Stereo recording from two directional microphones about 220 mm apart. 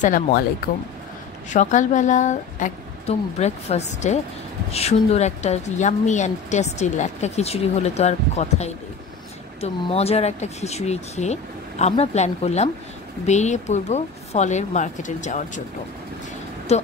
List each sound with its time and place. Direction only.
0.0 s a woman's voice: 40° left (ahead or behind)
1.5 s a woman's voice: 35° left (ahead or behind)
16.7 s speech: 30° left (ahead or behind)